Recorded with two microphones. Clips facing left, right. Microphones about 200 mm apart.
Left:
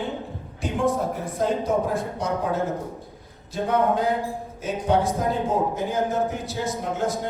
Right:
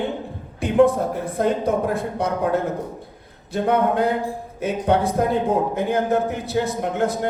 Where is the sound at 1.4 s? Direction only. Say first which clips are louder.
Right 2 dB; 60° right (ahead or behind).